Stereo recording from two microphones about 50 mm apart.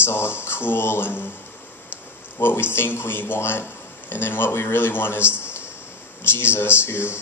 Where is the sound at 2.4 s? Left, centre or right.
Left.